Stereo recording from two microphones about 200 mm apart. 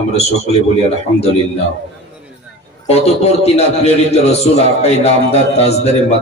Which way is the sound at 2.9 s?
30° left (ahead or behind).